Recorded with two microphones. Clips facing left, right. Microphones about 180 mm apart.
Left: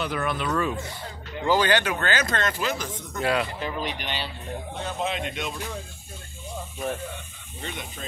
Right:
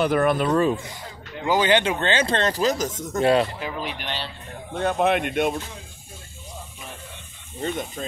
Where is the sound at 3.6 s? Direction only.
5° right (ahead or behind).